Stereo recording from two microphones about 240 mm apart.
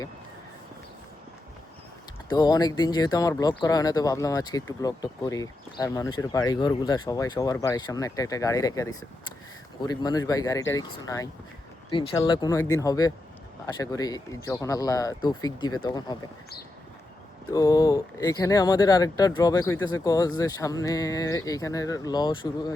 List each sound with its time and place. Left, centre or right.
2.3 s speech: centre
17.5 s speech: centre